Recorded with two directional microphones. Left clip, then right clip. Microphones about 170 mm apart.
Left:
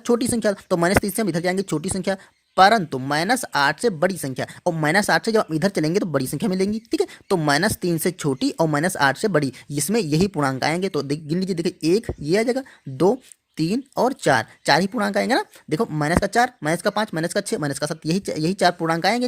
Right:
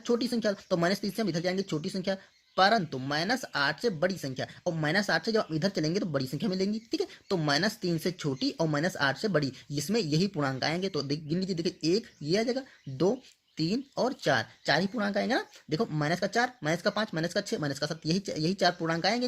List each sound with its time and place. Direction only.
0.0 s speech: 45° left (ahead or behind)